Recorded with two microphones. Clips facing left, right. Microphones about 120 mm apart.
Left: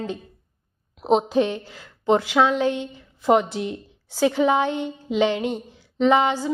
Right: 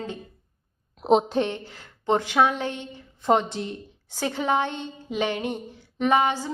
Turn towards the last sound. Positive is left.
turn(degrees=20)  # may be behind; listen again after turning